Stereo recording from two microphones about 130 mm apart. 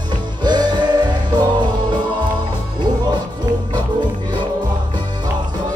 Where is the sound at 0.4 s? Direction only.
35° right (ahead or behind).